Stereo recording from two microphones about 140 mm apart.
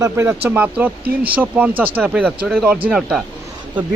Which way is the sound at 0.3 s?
10° right (ahead or behind).